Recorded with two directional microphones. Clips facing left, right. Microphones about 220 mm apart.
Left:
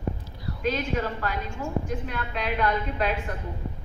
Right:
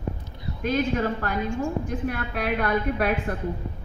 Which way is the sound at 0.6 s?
50° right (ahead or behind).